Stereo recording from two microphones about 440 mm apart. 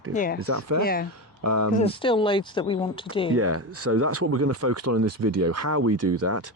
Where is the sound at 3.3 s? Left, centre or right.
Right.